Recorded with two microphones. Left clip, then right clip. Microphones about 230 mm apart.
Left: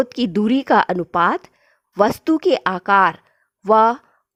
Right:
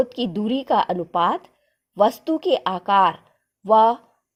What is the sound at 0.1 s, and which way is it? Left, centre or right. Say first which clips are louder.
Speech: left 5 dB; left.